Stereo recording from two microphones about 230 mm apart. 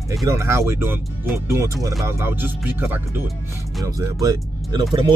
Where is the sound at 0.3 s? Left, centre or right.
Centre.